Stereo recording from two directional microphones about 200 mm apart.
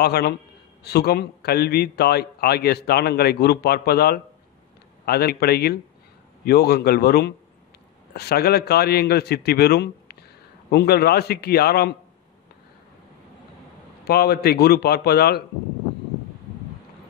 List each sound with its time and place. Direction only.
0.0 s a man's voice: 55° left (ahead or behind)
14.0 s a man's voice: 50° left (ahead or behind)